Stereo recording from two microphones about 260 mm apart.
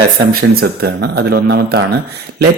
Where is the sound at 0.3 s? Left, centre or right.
Right.